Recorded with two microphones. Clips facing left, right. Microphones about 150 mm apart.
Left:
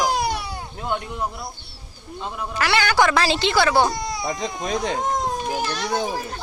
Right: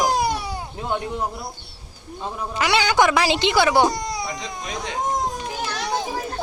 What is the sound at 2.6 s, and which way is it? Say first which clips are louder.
Speech: right 1 dB; 20° right (ahead or behind).